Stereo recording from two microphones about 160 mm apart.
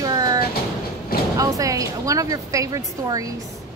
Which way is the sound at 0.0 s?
25° right (ahead or behind).